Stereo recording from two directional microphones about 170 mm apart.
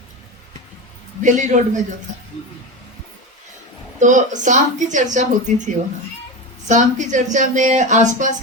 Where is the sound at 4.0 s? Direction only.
45° right (ahead or behind).